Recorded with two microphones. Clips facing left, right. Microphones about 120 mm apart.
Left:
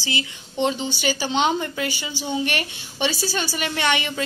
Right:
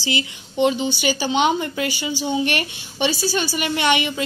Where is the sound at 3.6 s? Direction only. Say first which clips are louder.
Right 3 dB; 15° right (ahead or behind).